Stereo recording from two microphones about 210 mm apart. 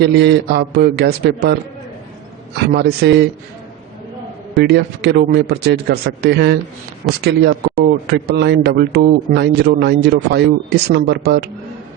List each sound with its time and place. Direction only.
0.0 s a man's voice: 55° right (ahead or behind)
2.6 s a man's voice: 50° right (ahead or behind)
4.5 s a man's voice: 50° right (ahead or behind)